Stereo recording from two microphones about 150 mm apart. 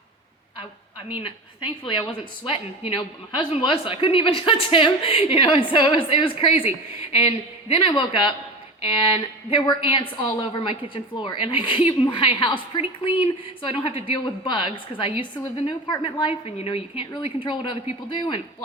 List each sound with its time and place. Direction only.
1.2 s a woman's voice: 35° left (ahead or behind)
9.5 s a woman's voice: 30° left (ahead or behind)